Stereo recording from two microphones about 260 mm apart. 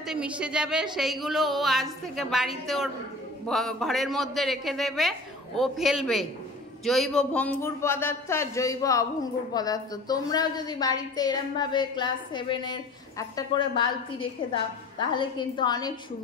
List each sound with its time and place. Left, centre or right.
0.0 s a woman's voice: centre